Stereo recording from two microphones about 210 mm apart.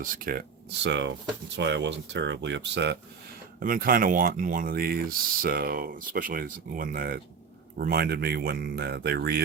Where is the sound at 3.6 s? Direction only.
40° right (ahead or behind).